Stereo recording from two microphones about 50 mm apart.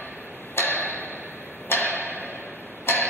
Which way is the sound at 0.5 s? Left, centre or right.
Left.